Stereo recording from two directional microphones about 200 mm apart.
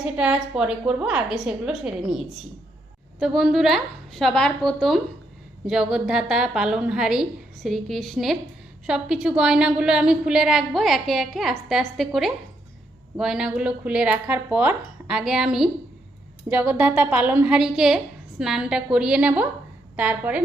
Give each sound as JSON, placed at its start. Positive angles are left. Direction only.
{"t": 0.0, "sound": "a woman's voice", "side_deg": -5}